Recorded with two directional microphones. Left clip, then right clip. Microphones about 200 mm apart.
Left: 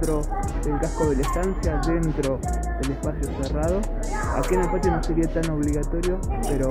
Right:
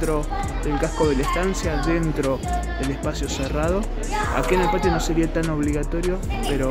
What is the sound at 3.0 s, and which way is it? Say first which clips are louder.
Speech: right 3 dB; 15° right (ahead or behind).